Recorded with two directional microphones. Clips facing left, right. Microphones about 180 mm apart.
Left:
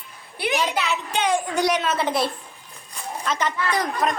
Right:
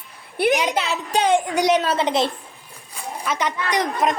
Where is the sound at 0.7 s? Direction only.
35° right (ahead or behind).